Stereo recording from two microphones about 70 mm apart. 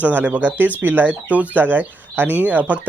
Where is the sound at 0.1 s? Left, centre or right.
Right.